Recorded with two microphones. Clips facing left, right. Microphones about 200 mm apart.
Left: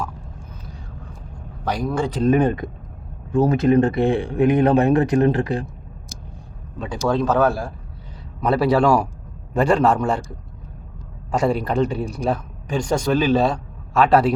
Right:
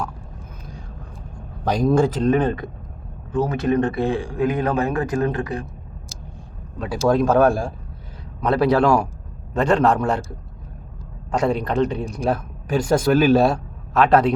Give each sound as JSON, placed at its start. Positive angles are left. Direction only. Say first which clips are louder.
{"t": 1.6, "sound": "a man's voice", "louder": "right 5 dB", "side_deg": -20}
{"t": 2.0, "sound": "a man's voice", "louder": "right 4 dB", "side_deg": -5}
{"t": 2.2, "sound": "speech", "louder": "left 1 dB", "side_deg": 10}
{"t": 3.4, "sound": "speech", "louder": "left 4 dB", "side_deg": 30}
{"t": 6.7, "sound": "a man's voice", "louder": "right 3 dB", "side_deg": -5}
{"t": 8.4, "sound": "a man's voice", "louder": "even", "side_deg": 5}
{"t": 11.3, "sound": "a man's voice", "louder": "left 1 dB", "side_deg": 5}
{"t": 12.2, "sound": "a man's voice", "louder": "right 1 dB", "side_deg": -5}